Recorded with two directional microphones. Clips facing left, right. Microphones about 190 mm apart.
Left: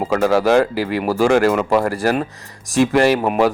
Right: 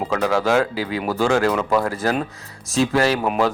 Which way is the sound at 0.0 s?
10° left (ahead or behind).